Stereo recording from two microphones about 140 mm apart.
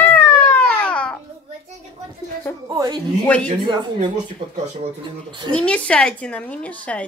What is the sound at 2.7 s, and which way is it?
Speech, 30° right (ahead or behind).